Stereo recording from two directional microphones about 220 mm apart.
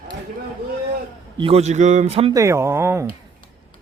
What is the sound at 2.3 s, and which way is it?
Speech, 15° right (ahead or behind).